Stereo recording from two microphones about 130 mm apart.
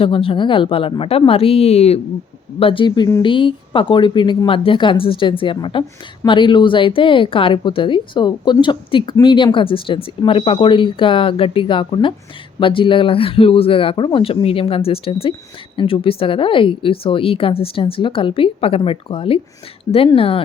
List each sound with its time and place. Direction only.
0.0 s speech: 45° left (ahead or behind)